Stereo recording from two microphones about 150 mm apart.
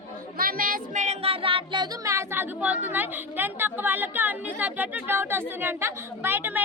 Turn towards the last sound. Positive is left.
turn(degrees=-15)  # may be behind; listen again after turning